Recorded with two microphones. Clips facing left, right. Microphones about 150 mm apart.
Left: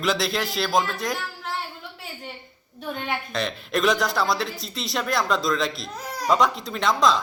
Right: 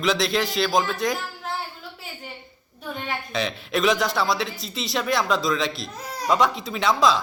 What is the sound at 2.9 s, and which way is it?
A woman's voice, centre (ahead or behind).